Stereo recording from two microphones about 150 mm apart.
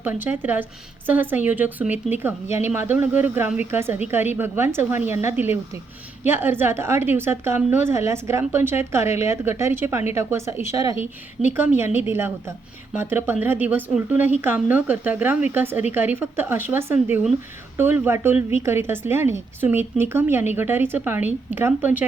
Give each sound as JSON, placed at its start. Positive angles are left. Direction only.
{"t": 0.0, "sound": "a woman's voice", "side_deg": -10}